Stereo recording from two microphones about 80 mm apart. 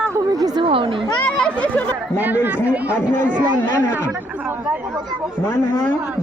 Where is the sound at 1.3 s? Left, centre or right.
Centre.